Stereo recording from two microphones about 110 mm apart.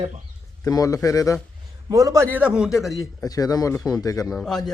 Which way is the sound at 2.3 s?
10° right (ahead or behind).